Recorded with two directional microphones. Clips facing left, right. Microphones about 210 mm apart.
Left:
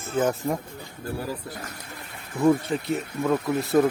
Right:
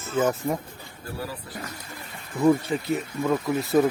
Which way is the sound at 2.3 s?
Centre (ahead or behind).